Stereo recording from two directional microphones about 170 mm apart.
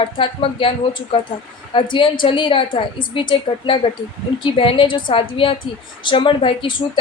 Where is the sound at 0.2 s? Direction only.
30° left (ahead or behind).